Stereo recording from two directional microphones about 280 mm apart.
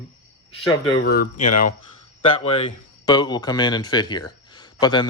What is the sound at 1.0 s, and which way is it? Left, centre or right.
Speech, left.